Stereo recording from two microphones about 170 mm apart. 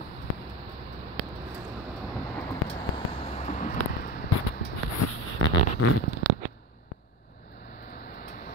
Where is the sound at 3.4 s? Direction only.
45° left (ahead or behind).